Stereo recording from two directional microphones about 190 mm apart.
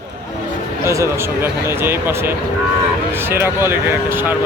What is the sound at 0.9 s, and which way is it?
Speech, 15° right (ahead or behind).